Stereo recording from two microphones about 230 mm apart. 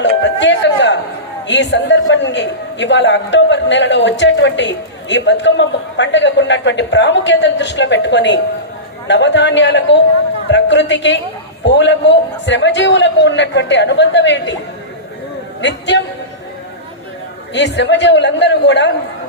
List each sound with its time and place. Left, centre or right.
0.0 s music: left
1.5 s a man's voice: left
15.6 s a man's voice: left
17.5 s a man's voice: left